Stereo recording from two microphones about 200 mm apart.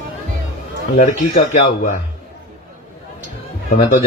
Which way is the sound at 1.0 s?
40° left (ahead or behind).